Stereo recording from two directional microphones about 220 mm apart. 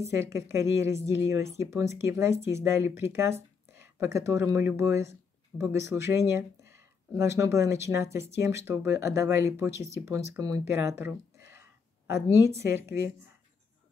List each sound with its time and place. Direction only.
0.1 s a woman's voice: 15° right (ahead or behind)